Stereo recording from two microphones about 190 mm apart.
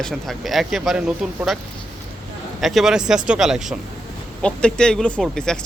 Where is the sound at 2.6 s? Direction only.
Centre (ahead or behind).